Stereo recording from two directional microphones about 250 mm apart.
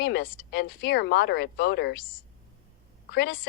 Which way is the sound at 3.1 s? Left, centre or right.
Left.